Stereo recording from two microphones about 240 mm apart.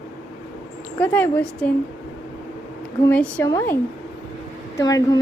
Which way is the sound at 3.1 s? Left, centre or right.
Centre.